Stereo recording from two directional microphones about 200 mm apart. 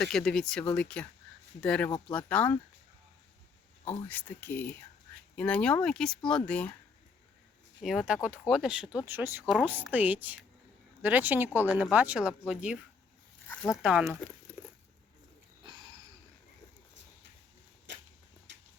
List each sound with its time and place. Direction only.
0.0 s speech: centre (ahead or behind)
4.1 s speech: 10° left (ahead or behind)
7.8 s speech: centre (ahead or behind)
13.5 s speech: 10° left (ahead or behind)
13.8 s speech: 5° right (ahead or behind)
15.6 s a sound: 25° right (ahead or behind)
17.9 s a sound: 65° right (ahead or behind)